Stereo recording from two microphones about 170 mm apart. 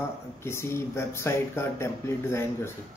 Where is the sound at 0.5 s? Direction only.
15° left (ahead or behind).